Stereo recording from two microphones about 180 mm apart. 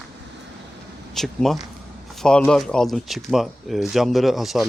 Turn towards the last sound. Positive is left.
turn(degrees=0)  # may be behind; listen again after turning